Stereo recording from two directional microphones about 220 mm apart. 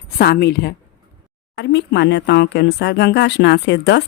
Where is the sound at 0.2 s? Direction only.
45° left (ahead or behind).